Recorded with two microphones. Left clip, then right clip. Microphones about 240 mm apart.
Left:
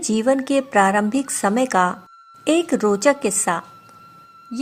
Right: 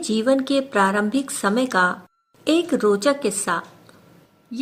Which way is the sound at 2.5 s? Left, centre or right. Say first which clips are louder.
Even; left.